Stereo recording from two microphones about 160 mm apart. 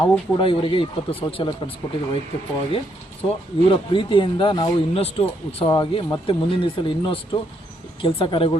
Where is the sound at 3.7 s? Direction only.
30° left (ahead or behind).